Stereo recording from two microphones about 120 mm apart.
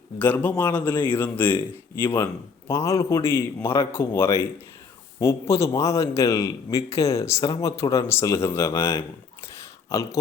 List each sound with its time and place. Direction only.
0.2 s a man's voice: 15° left (ahead or behind)
7.4 s speech: 35° left (ahead or behind)
7.8 s a man's voice: 25° left (ahead or behind)
9.6 s a sound: 25° left (ahead or behind)